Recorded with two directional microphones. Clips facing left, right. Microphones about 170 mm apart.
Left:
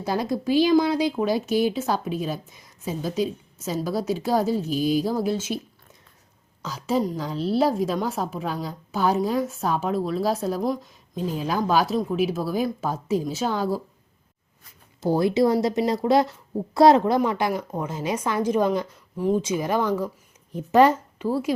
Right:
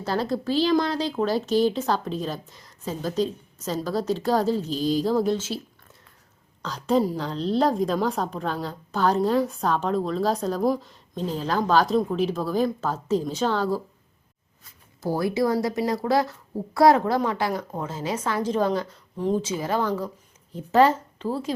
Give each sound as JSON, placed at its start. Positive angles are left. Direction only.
{"t": 0.0, "sound": "speech", "side_deg": 10}
{"t": 6.6, "sound": "a woman's voice", "side_deg": 5}
{"t": 15.0, "sound": "speech", "side_deg": 20}